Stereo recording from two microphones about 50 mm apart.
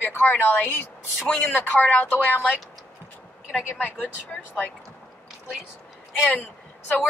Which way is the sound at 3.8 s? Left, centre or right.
Left.